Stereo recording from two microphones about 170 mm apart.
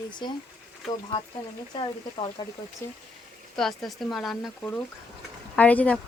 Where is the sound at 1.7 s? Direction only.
30° left (ahead or behind).